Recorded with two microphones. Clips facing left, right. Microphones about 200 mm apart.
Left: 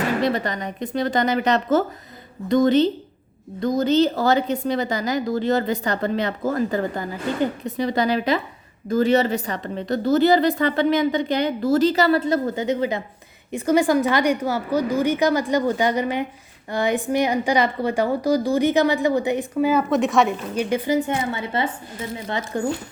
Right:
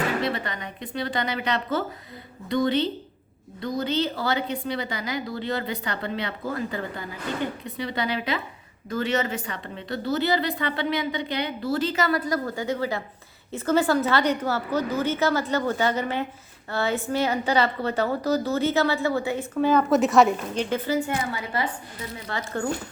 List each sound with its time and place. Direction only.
0.2 s a woman's voice: 40° left (ahead or behind); by 19.8 s 10° left (ahead or behind)
19.9 s a woman's voice: centre (ahead or behind)
20.6 s a woman's voice: 15° left (ahead or behind)